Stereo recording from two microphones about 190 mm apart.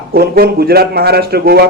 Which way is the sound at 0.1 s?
55° right (ahead or behind).